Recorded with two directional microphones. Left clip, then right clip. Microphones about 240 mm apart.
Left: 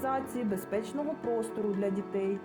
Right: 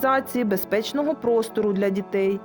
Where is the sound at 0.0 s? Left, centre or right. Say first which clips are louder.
Right 11 dB; right.